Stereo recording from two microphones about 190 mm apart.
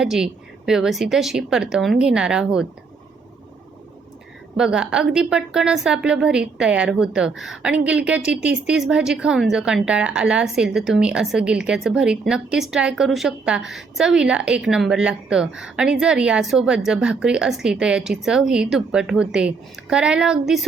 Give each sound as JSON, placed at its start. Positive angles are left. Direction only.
{"t": 0.0, "sound": "a woman's voice", "side_deg": -5}
{"t": 4.5, "sound": "a woman's voice", "side_deg": -5}